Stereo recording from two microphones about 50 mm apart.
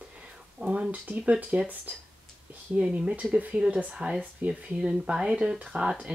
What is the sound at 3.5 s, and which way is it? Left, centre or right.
Speech, centre.